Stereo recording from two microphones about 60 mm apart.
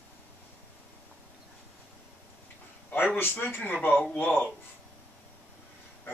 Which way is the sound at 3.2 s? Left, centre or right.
Left.